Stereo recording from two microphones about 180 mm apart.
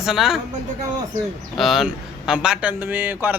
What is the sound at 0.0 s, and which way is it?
Speech, centre (ahead or behind).